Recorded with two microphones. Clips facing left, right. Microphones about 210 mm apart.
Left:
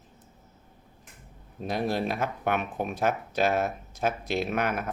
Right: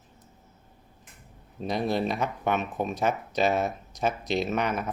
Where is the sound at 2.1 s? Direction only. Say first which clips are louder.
Right 1 dB; 50° left (ahead or behind).